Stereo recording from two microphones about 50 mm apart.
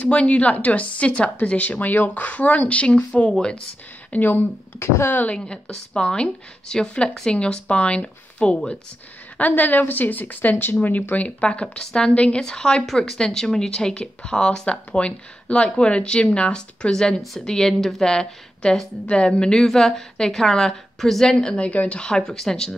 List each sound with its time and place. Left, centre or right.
0.0 s speech: left
4.1 s a woman's voice: left
4.7 s speech: left
5.3 s speech: centre
9.4 s a woman's voice: left
11.4 s a woman's voice: centre
12.1 s a woman's voice: left
12.8 s a woman's voice: centre